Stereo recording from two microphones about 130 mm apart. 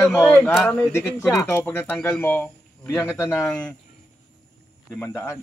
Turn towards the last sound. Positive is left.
turn(degrees=20)  # may be behind; listen again after turning